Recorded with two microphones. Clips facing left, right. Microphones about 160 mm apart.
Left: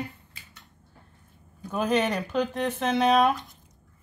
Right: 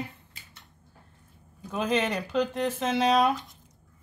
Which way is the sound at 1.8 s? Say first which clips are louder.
Left 2 dB; 5° left (ahead or behind).